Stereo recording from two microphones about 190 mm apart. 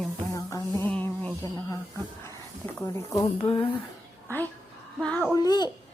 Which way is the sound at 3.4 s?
30° left (ahead or behind).